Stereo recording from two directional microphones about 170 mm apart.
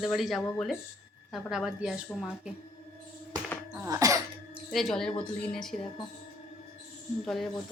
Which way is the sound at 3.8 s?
20° right (ahead or behind).